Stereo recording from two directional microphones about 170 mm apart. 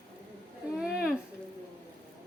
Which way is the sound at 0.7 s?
5° right (ahead or behind).